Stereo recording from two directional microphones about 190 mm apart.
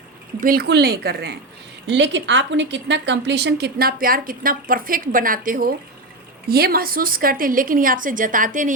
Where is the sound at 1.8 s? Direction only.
70° right (ahead or behind).